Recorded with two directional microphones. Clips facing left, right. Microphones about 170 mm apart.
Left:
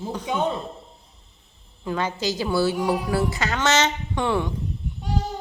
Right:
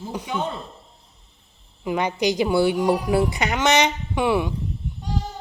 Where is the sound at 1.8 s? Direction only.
15° right (ahead or behind).